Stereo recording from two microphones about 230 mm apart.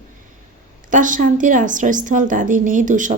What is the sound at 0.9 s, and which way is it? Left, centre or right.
A woman's voice, right.